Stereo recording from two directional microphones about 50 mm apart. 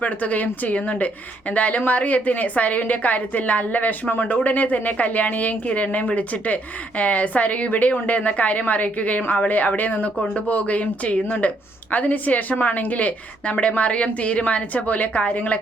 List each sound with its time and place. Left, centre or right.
0.0 s a woman's voice: left